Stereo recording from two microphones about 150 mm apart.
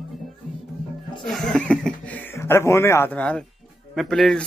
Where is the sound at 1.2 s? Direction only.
5° left (ahead or behind).